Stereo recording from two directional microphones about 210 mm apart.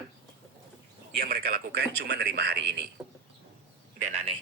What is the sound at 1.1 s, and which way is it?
Speech, 45° right (ahead or behind).